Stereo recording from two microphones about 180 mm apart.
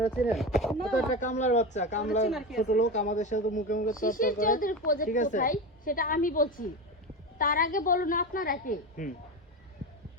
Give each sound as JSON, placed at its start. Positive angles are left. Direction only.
{"t": 0.3, "sound": "speech", "side_deg": 0}
{"t": 1.1, "sound": "speech", "side_deg": 45}
{"t": 2.3, "sound": "speech", "side_deg": 0}
{"t": 2.6, "sound": "a woman's voice", "side_deg": 40}